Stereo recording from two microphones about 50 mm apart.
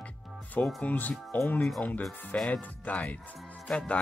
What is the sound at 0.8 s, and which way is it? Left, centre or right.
Speech, left.